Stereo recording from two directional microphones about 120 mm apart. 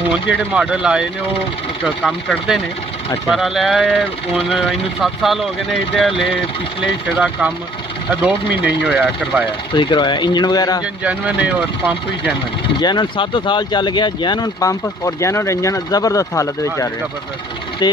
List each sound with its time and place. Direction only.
0.1 s speech: 10° right (ahead or behind)
2.0 s speech: 5° right (ahead or behind)
6.8 s speech: 10° right (ahead or behind)
9.8 s speech: 40° left (ahead or behind)
11.1 s speech: 10° right (ahead or behind)
12.8 s speech: 40° left (ahead or behind)